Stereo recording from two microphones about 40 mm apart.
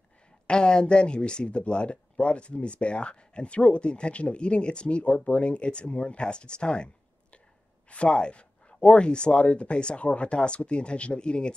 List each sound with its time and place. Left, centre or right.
0.5 s speech: left
7.9 s speech: left